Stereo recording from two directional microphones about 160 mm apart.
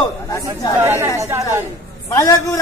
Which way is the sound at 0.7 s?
15° right (ahead or behind).